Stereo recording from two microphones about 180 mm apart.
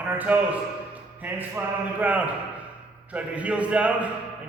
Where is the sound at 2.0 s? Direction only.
10° right (ahead or behind).